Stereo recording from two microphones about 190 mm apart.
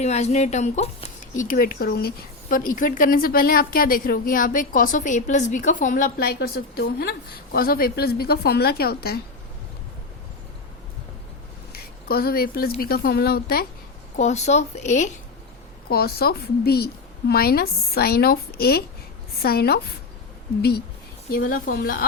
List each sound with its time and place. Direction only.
0.0 s a woman's voice: 35° left (ahead or behind); by 9.2 s 55° left (ahead or behind)
11.7 s speech: 55° left (ahead or behind)
14.2 s speech: 35° left (ahead or behind)
15.9 s a woman's voice: 55° left (ahead or behind)